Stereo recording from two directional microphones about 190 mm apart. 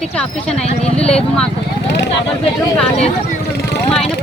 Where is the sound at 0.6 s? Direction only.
35° left (ahead or behind).